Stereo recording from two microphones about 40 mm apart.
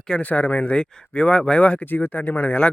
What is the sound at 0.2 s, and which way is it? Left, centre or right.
Speech, left.